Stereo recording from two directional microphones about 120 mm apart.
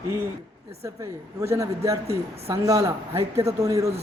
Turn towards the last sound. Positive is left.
turn(degrees=-25)  # may be behind; listen again after turning